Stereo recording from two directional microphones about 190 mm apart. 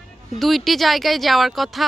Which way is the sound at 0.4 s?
Centre (ahead or behind).